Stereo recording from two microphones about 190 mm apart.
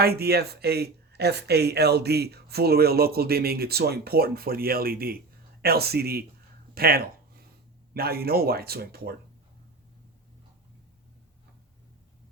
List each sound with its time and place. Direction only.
0.0 s speech: 55° right (ahead or behind)